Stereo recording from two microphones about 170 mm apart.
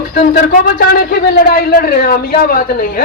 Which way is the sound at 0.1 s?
60° left (ahead or behind).